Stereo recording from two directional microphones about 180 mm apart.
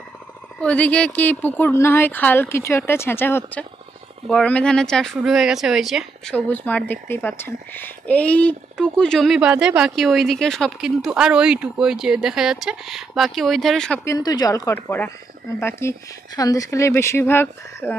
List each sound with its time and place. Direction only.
0.6 s a woman's voice: 10° left (ahead or behind)
14.0 s a woman's voice: 20° left (ahead or behind)